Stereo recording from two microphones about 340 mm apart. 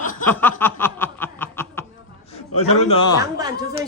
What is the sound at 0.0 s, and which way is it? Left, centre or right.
Snicker, left.